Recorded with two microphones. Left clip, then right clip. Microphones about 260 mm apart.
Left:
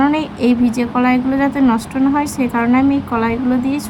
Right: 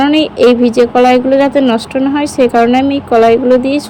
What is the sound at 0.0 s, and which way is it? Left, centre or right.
A woman's voice, centre.